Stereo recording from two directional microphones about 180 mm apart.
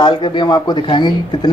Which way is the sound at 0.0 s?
25° left (ahead or behind).